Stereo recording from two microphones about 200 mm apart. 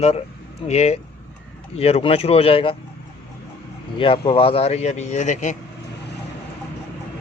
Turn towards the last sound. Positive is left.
turn(degrees=35)  # may be behind; listen again after turning